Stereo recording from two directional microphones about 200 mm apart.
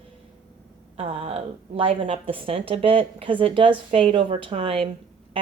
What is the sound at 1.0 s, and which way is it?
A woman's voice, 30° right (ahead or behind).